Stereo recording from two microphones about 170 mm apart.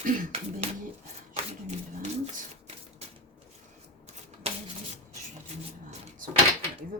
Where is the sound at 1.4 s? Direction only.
40° right (ahead or behind).